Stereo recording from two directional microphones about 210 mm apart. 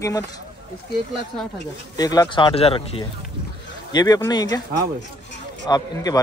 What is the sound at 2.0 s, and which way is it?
Speech, 20° left (ahead or behind).